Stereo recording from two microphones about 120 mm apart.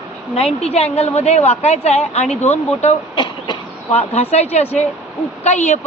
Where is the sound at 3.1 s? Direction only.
40° left (ahead or behind).